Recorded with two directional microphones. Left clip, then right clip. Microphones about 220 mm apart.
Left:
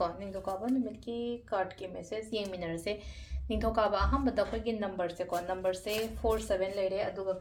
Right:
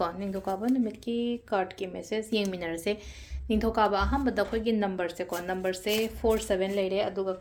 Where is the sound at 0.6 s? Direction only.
35° right (ahead or behind).